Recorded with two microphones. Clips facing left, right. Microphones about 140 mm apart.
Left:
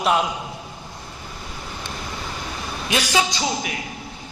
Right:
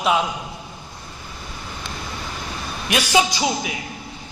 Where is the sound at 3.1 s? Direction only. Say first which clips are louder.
Right 5 dB; 15° right (ahead or behind).